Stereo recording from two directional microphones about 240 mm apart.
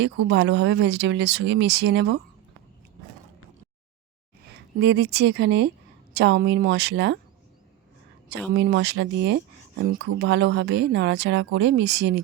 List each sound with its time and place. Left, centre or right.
0.0 s speech: right
4.4 s speech: right
8.3 s speech: right